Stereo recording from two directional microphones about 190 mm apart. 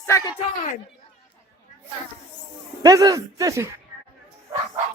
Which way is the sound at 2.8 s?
20° right (ahead or behind).